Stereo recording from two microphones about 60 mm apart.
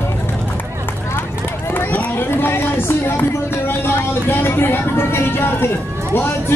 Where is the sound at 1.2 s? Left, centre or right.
Left.